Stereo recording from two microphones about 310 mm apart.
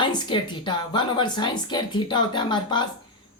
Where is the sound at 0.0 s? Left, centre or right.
Centre.